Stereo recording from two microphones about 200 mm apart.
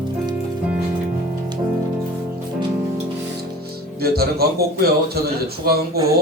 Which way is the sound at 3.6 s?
50° right (ahead or behind).